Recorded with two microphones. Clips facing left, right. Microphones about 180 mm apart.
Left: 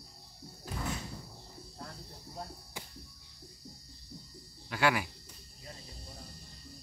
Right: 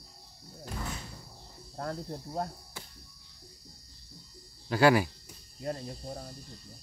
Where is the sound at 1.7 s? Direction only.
65° right (ahead or behind).